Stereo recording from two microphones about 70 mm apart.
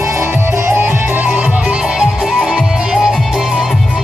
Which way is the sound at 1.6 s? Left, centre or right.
Centre.